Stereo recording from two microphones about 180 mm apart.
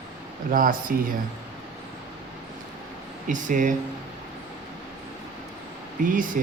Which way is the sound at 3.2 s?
45° right (ahead or behind).